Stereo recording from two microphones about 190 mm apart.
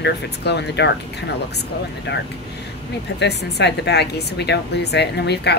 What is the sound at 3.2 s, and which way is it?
A woman's voice, 60° left (ahead or behind).